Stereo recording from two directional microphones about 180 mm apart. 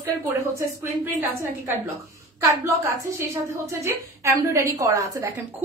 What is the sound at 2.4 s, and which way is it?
A woman's voice, 15° right (ahead or behind).